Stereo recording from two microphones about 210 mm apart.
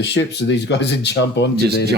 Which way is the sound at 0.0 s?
55° left (ahead or behind).